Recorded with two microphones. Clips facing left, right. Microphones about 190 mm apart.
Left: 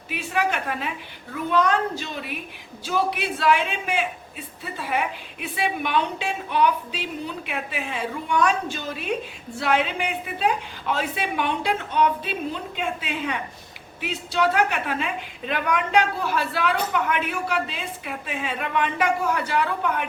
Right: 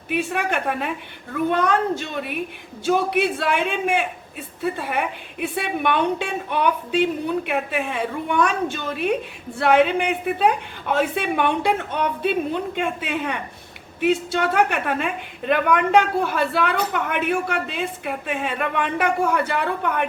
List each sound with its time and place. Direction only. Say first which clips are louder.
0.1 s a man's voice: right 2 dB; 55° right (ahead or behind)